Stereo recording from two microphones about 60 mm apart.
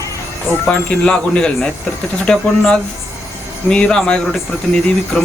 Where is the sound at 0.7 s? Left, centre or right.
Centre.